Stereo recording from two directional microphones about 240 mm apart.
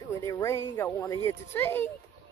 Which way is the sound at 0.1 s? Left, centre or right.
Centre.